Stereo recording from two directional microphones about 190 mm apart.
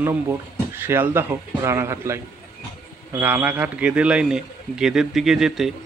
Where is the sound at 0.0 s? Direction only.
10° right (ahead or behind).